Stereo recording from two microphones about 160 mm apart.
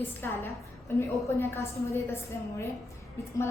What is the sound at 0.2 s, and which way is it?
A woman's voice, 15° left (ahead or behind).